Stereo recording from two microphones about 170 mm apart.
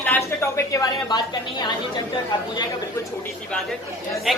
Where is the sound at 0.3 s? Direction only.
15° left (ahead or behind).